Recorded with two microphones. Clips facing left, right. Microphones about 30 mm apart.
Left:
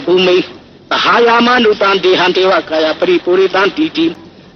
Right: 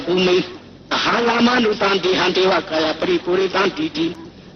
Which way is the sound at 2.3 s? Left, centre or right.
Left.